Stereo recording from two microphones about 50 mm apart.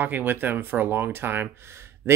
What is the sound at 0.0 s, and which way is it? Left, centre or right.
Speech, right.